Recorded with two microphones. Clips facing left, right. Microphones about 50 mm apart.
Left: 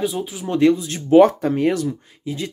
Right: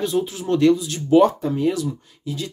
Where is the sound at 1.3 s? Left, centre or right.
Left.